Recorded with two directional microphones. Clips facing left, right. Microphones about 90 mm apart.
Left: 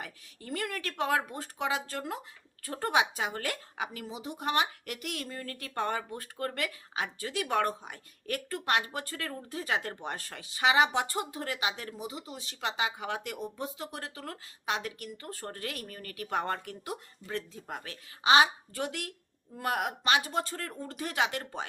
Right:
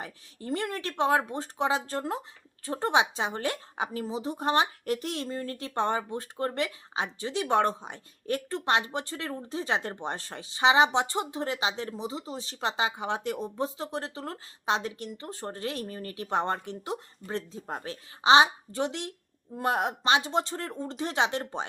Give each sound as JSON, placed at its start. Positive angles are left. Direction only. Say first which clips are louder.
{"t": 0.0, "sound": "speech", "louder": "right 5 dB", "side_deg": -30}